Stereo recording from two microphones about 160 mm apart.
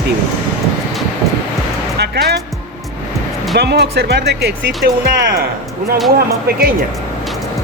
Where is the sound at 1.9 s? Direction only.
90° right.